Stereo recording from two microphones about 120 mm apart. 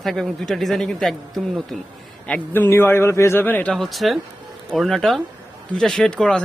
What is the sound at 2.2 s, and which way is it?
A man's voice, 15° left (ahead or behind).